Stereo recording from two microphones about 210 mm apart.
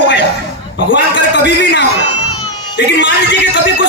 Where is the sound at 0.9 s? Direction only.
60° left (ahead or behind).